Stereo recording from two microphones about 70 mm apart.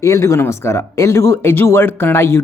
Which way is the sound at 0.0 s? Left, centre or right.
Left.